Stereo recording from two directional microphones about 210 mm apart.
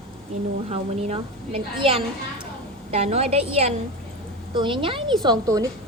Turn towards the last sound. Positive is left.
turn(degrees=-20)  # may be behind; listen again after turning